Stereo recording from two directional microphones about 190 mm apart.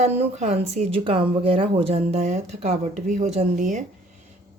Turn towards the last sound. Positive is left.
turn(degrees=-40)  # may be behind; listen again after turning